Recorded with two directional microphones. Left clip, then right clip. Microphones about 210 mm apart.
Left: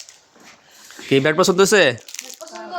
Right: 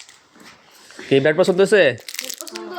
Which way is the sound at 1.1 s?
25° left (ahead or behind).